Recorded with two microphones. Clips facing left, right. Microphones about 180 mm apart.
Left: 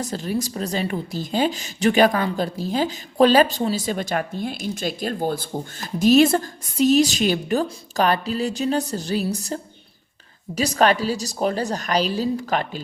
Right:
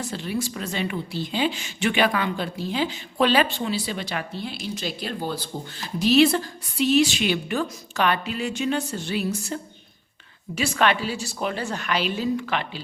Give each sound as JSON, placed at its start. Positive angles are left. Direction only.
{"t": 0.0, "sound": "a woman's voice", "side_deg": 40}